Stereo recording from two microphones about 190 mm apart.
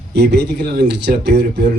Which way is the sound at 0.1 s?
60° right (ahead or behind).